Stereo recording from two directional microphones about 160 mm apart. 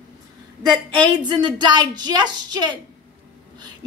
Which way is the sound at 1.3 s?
30° right (ahead or behind).